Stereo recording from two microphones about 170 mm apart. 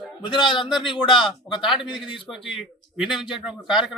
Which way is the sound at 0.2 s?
30° left (ahead or behind).